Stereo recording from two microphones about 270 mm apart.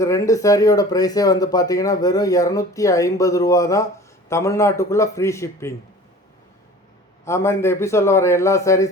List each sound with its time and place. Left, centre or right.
0.0 s speech: centre
7.3 s speech: centre